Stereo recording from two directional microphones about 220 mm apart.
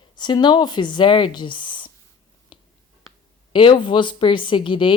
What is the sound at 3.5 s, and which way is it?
Speech, 25° left (ahead or behind).